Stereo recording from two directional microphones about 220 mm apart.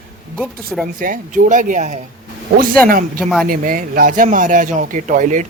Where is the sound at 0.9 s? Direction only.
40° right (ahead or behind).